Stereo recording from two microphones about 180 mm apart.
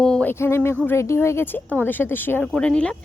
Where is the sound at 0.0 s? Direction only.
5° left (ahead or behind).